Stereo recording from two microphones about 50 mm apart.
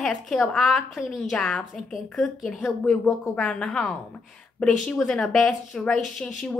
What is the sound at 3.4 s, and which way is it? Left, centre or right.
Speech, centre.